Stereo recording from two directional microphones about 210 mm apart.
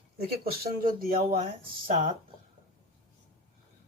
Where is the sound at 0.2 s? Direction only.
45° right (ahead or behind).